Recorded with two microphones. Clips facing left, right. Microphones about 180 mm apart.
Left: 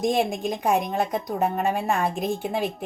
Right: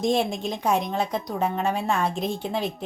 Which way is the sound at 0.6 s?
15° left (ahead or behind).